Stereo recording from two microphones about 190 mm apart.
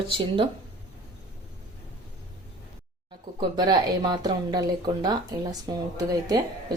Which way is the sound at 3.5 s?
20° right (ahead or behind).